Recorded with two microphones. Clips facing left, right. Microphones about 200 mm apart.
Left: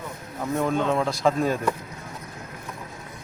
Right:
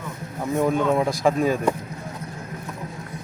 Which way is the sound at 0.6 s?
10° right (ahead or behind).